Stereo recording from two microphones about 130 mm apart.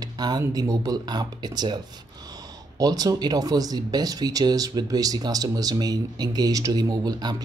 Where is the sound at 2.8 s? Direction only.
30° right (ahead or behind).